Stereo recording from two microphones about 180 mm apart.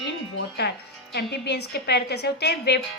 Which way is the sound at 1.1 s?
65° left (ahead or behind).